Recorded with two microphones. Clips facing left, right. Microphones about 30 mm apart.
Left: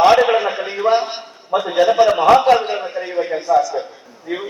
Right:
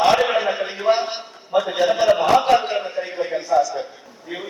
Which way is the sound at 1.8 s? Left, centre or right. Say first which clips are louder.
Left 7 dB; centre.